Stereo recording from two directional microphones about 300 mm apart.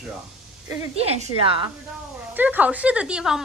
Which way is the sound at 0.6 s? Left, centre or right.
Centre.